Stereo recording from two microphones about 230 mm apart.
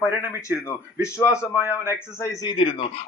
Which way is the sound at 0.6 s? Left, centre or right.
Centre.